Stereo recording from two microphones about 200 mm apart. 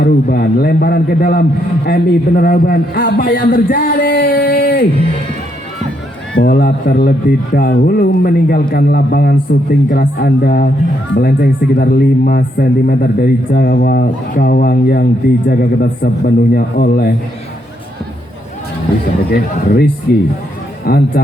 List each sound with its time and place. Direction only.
0.0 s a man's voice: 50° left (ahead or behind)
6.4 s a man's voice: 50° left (ahead or behind)
19.3 s a man's voice: 50° left (ahead or behind)